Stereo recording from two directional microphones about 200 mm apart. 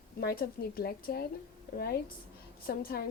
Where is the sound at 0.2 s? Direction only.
50° left (ahead or behind).